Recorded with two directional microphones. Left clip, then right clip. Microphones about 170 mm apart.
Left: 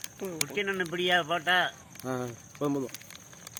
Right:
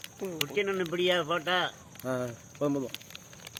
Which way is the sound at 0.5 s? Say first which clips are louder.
Right 1 dB; 70° right (ahead or behind).